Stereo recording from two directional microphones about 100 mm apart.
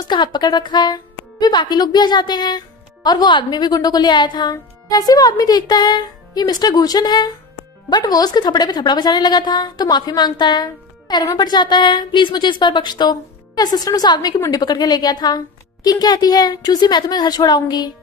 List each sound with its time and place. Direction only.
0.1 s a woman's voice: 45° left (ahead or behind)